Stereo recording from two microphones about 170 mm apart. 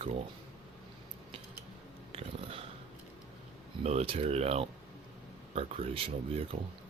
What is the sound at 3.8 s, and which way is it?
Speech, 35° right (ahead or behind).